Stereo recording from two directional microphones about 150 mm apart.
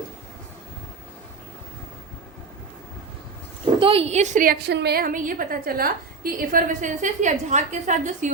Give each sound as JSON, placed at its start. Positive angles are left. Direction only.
{"t": 3.8, "sound": "a woman's voice", "side_deg": -40}